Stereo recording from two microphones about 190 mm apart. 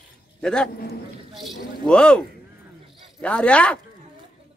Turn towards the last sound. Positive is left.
turn(degrees=5)  # may be behind; listen again after turning